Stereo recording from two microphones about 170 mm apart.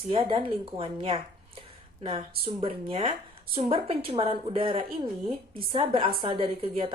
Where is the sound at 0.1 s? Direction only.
35° right (ahead or behind).